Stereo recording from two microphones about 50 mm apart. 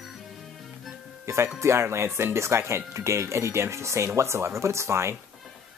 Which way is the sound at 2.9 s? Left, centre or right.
Right.